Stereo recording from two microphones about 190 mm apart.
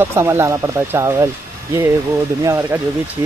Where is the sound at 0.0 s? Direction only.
15° right (ahead or behind).